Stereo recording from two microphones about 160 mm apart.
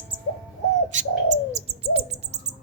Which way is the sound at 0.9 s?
50° right (ahead or behind).